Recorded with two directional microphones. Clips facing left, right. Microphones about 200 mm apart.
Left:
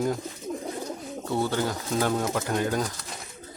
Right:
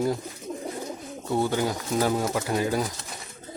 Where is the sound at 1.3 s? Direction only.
15° right (ahead or behind).